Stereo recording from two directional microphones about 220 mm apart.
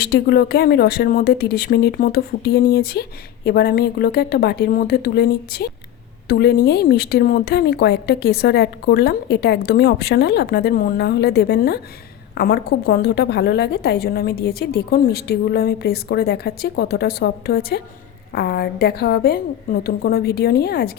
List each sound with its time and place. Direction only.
0.0 s speech: 45° left (ahead or behind)